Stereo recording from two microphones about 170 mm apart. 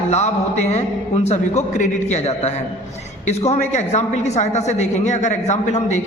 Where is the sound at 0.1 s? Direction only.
40° left (ahead or behind).